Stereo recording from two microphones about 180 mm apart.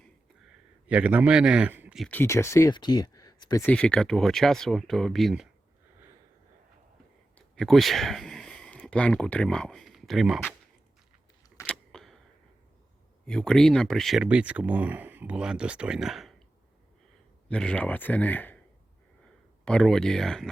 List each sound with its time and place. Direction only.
0.0 s a sound: 5° right (ahead or behind)
2.0 s speech: 10° left (ahead or behind)
3.6 s speech: 5° left (ahead or behind)
7.3 s speech: centre (ahead or behind)
11.6 s a sound: 5° left (ahead or behind)
13.2 s speech: 5° left (ahead or behind)
17.5 s speech: 5° left (ahead or behind)
19.6 s speech: 5° left (ahead or behind)